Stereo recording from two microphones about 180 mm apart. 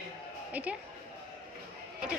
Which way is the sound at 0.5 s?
10° right (ahead or behind).